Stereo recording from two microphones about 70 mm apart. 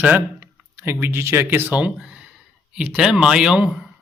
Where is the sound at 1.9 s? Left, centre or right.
Centre.